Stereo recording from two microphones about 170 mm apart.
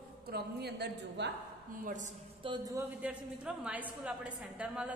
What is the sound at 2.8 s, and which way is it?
A woman's voice, 5° right (ahead or behind).